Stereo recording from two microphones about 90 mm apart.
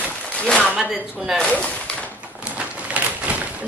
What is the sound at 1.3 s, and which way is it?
Speech, 10° left (ahead or behind).